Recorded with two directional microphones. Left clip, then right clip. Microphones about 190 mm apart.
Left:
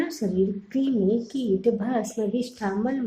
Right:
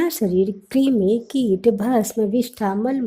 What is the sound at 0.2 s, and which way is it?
A woman's voice, 45° right (ahead or behind).